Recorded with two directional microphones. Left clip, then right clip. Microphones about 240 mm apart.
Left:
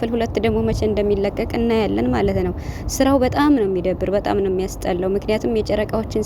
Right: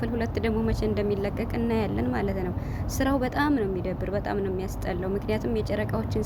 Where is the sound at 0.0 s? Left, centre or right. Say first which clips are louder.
Left 9 dB; left.